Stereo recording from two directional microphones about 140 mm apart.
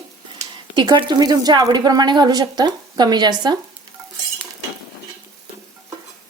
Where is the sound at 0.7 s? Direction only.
30° right (ahead or behind).